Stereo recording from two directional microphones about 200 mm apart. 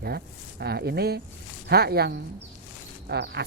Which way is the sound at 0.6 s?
55° right (ahead or behind).